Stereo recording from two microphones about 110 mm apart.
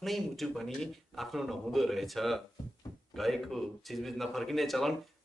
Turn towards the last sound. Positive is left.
turn(degrees=0)  # may be behind; listen again after turning